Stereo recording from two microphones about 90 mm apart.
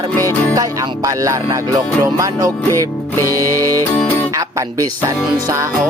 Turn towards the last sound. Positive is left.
turn(degrees=-40)  # may be behind; listen again after turning